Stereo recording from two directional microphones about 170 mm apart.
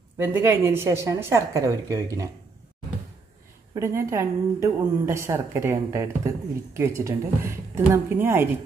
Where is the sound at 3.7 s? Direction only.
20° right (ahead or behind).